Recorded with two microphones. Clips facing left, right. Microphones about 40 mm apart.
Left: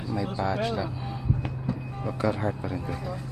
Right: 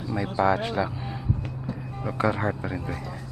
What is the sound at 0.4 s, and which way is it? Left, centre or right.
Speech, right.